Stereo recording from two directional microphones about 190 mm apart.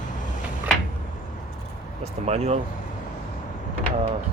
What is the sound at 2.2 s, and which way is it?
Speech, 35° right (ahead or behind).